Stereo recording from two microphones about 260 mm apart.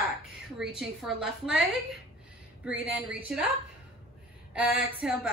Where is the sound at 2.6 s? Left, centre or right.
Centre.